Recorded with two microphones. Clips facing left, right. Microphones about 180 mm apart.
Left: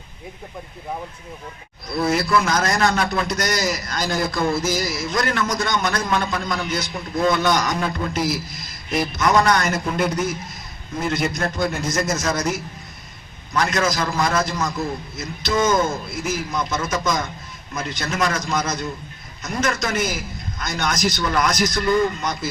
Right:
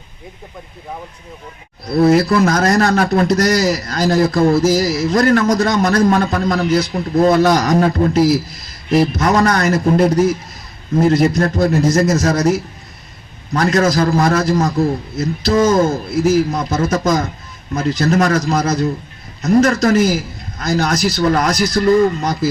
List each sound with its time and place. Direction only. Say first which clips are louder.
1.9 s a man's voice: right 8 dB; 35° right (ahead or behind)